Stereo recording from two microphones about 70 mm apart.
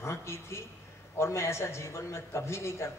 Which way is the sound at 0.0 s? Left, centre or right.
Left.